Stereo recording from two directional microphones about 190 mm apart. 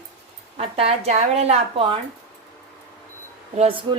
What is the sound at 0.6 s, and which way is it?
A woman's voice, 30° right (ahead or behind).